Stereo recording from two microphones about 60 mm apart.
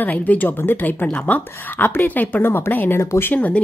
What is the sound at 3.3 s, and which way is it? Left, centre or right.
Speech, left.